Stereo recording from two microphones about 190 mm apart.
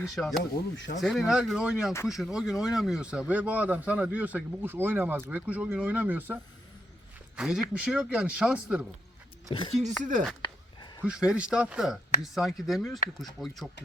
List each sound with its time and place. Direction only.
0.2 s speech: centre (ahead or behind)
0.5 s speech: 40° left (ahead or behind)
1.0 s speech: centre (ahead or behind)
9.5 s speech: 25° left (ahead or behind)
10.0 s speech: 40° right (ahead or behind)
10.4 s a sound: 25° left (ahead or behind)
11.0 s speech: 5° right (ahead or behind)